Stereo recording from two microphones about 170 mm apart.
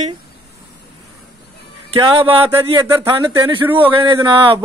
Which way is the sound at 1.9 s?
30° right (ahead or behind).